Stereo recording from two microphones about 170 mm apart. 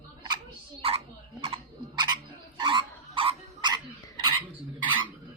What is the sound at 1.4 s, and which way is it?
Frog, 30° right (ahead or behind).